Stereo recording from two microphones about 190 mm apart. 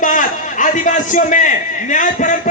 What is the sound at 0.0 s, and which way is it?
A man's voice, 45° left (ahead or behind).